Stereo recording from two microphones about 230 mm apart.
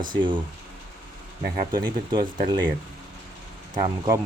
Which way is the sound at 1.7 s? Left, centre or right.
Centre.